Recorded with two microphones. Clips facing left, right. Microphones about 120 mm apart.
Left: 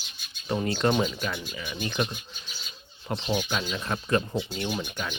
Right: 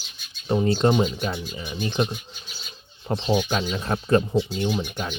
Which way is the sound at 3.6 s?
30° right (ahead or behind).